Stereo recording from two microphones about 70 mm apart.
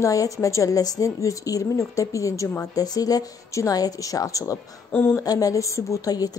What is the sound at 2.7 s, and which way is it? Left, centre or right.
A woman's voice, left.